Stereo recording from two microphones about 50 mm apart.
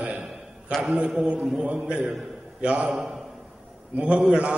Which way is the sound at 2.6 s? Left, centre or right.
Right.